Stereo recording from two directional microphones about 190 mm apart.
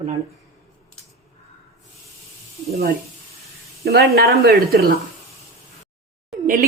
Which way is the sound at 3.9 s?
55° right (ahead or behind).